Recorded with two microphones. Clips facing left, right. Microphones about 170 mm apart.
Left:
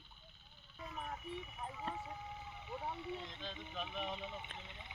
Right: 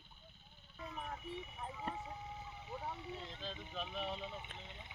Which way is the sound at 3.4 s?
Centre (ahead or behind).